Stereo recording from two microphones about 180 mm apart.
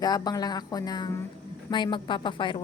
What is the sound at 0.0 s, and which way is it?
A woman's voice, 20° left (ahead or behind).